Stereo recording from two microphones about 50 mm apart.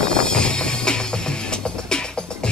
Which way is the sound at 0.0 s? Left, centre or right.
Centre.